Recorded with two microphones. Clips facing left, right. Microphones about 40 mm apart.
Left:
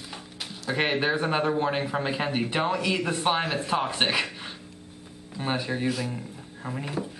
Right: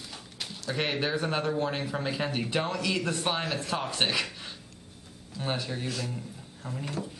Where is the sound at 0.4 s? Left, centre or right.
Centre.